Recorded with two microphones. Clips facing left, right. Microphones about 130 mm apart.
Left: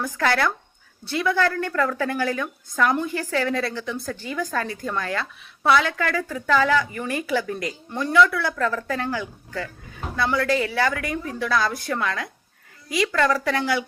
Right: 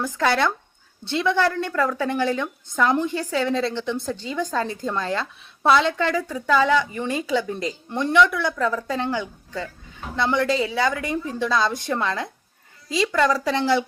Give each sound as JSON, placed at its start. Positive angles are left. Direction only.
{"t": 0.1, "sound": "a woman's voice", "side_deg": -20}